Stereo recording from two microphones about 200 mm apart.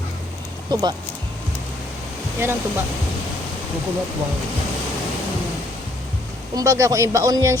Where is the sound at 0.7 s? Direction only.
20° right (ahead or behind).